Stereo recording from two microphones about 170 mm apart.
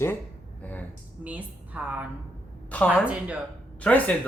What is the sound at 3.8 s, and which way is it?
Speech, 10° left (ahead or behind).